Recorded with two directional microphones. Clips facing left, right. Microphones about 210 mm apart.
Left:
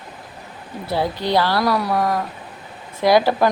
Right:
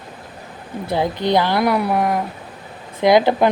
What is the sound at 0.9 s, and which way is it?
Speech, 20° right (ahead or behind).